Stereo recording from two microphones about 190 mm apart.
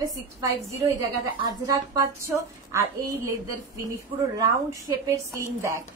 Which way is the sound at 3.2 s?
15° right (ahead or behind).